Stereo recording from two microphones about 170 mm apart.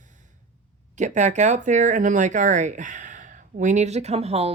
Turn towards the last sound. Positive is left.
turn(degrees=-35)  # may be behind; listen again after turning